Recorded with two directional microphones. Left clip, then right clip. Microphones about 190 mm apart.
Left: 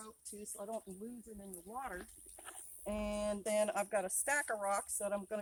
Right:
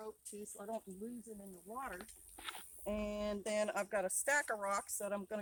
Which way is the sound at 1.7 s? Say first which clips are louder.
Left 1 dB; 30° left (ahead or behind).